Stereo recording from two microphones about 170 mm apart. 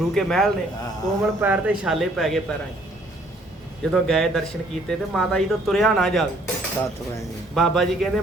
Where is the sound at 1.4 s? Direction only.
10° right (ahead or behind).